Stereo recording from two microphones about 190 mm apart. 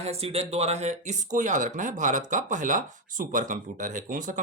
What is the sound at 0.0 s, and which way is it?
Speech, 35° right (ahead or behind).